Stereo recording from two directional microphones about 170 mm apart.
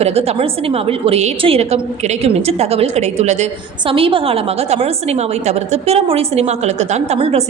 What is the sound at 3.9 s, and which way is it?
A woman's voice, 30° right (ahead or behind).